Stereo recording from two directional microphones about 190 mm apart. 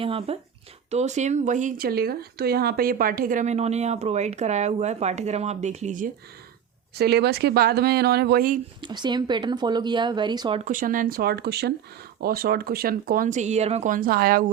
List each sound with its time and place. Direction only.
0.0 s speech: 30° right (ahead or behind)
6.9 s speech: 55° right (ahead or behind)
8.8 s speech: 25° right (ahead or behind)
10.7 s speech: 45° right (ahead or behind)